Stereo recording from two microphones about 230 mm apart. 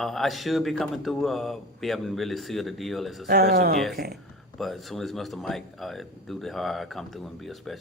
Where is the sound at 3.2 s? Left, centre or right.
Right.